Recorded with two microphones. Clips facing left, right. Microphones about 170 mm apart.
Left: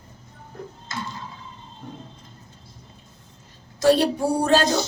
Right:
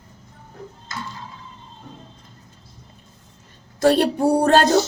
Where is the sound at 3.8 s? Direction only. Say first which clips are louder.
Right 2 dB; 55° right (ahead or behind).